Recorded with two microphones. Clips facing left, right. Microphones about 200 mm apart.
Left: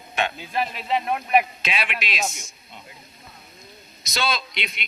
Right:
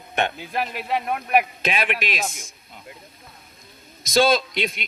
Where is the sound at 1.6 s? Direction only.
50° right (ahead or behind).